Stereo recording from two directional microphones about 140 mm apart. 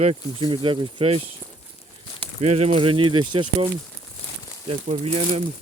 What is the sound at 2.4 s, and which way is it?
Speech, 50° right (ahead or behind).